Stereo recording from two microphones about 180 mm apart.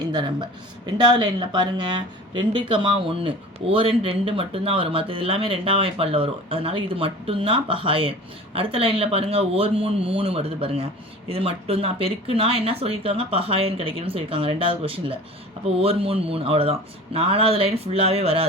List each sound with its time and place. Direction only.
0.0 s a woman's voice: 25° right (ahead or behind)